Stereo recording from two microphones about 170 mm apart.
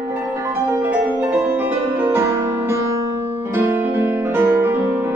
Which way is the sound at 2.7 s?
15° right (ahead or behind).